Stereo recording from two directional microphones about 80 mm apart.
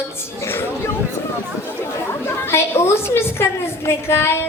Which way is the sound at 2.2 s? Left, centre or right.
Left.